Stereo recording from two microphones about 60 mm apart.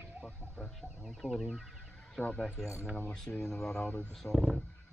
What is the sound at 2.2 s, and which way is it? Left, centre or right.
Speech, centre.